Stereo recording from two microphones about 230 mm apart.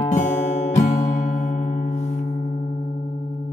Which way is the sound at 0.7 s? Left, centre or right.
Left.